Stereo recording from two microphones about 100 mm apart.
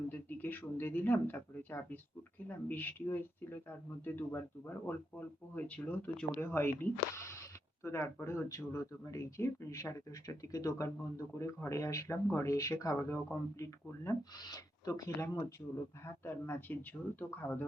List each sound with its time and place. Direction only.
0.1 s speech: 20° left (ahead or behind)
14.3 s speech: 40° left (ahead or behind)
16.2 s speech: 20° left (ahead or behind)